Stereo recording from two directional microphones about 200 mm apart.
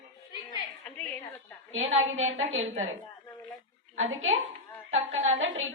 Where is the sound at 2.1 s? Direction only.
75° right (ahead or behind).